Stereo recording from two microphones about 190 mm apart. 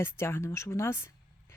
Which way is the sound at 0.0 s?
15° left (ahead or behind).